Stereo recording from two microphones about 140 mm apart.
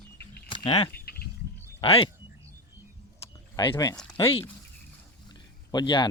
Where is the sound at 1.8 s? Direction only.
40° left (ahead or behind).